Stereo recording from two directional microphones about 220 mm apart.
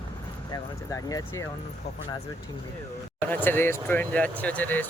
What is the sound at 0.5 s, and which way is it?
Speech, 15° left (ahead or behind).